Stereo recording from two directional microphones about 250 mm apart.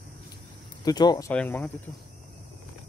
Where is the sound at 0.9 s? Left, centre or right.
Centre.